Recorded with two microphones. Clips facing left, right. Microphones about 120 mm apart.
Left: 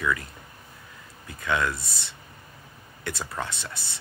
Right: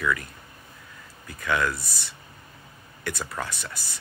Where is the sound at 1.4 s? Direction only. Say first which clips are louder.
Right 1 dB; 20° left (ahead or behind).